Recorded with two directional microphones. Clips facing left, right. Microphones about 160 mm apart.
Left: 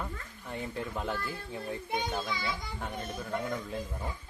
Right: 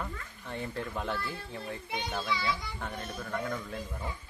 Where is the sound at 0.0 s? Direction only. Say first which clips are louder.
Even; 5° left (ahead or behind).